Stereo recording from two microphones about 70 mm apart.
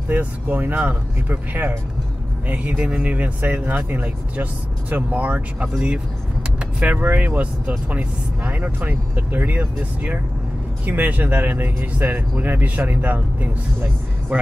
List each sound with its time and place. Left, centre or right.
0.1 s speech: right
6.6 s vehicle: centre
7.0 s speech: right
14.3 s speech: centre